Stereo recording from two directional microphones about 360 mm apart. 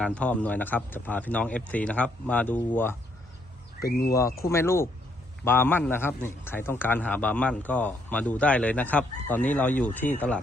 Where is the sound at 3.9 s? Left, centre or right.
Left.